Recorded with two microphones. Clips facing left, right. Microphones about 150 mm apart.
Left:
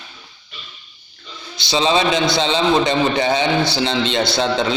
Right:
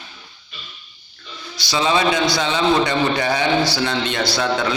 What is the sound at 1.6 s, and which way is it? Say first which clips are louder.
A man's voice: left 2 dB; 25° left (ahead or behind).